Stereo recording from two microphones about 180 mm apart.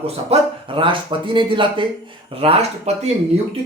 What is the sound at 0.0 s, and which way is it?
Speech, 30° right (ahead or behind).